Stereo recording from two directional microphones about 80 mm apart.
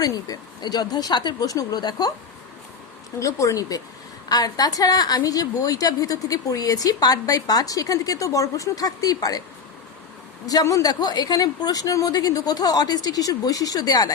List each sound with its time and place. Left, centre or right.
0.0 s speech: left
3.2 s a woman's voice: left
10.4 s a woman's voice: left
11.0 s a woman's voice: left